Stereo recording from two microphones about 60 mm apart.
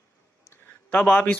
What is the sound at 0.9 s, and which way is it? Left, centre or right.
Speech, left.